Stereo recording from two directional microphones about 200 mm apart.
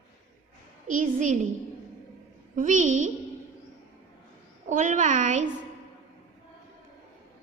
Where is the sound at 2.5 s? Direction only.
40° right (ahead or behind).